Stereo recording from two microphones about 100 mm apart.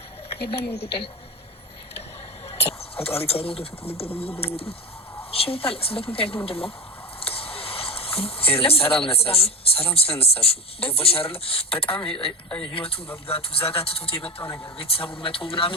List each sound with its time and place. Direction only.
0.3 s speech: 70° left (ahead or behind)
2.5 s speech: 80° left
7.2 s a sound: 75° left (ahead or behind)
9.0 s speech: 75° left (ahead or behind)
14.4 s speech: 30° left (ahead or behind)
14.8 s speech: 70° left (ahead or behind)